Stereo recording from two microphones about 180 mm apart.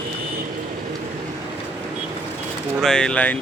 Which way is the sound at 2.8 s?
5° left (ahead or behind).